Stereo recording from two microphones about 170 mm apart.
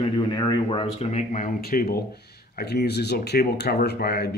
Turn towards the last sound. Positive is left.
turn(degrees=70)  # may be behind; listen again after turning